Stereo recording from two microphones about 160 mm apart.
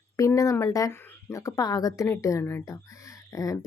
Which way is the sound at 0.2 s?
20° left (ahead or behind).